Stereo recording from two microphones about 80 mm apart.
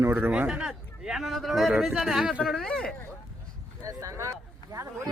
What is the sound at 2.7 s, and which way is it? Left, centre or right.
Speech, centre.